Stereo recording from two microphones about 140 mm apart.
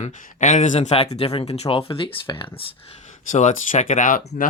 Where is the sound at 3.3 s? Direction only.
60° left (ahead or behind); by 4.5 s 75° left (ahead or behind).